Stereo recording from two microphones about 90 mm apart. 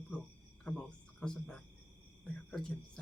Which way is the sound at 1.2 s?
10° left (ahead or behind).